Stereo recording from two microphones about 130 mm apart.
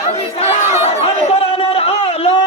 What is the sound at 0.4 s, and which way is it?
Chatter, 55° left (ahead or behind).